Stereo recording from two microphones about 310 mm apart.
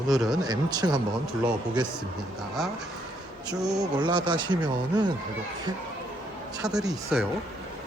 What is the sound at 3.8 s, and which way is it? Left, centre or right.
Speech, centre.